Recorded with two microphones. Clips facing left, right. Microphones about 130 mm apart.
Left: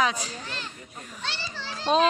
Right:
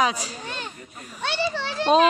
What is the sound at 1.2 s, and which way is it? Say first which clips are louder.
Children playing: right 11 dB; 60° right (ahead or behind).